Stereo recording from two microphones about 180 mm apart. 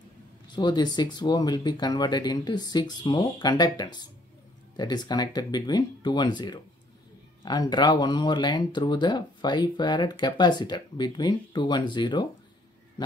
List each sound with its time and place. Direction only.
0.5 s speech: 25° left (ahead or behind)